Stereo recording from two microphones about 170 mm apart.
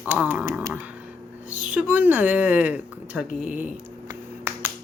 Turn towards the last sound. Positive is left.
turn(degrees=-15)  # may be behind; listen again after turning